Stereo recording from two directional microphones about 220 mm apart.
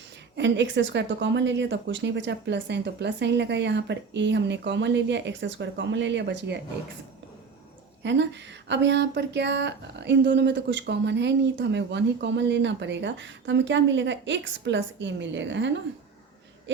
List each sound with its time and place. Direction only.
0.3 s speech: 55° right (ahead or behind)
8.0 s speech: 55° right (ahead or behind)